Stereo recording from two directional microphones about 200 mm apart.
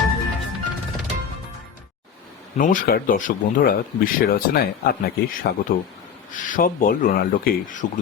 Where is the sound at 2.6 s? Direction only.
40° left (ahead or behind).